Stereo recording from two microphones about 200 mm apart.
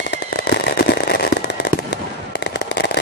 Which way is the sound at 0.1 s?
55° left (ahead or behind).